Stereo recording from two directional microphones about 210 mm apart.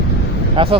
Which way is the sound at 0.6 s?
25° right (ahead or behind).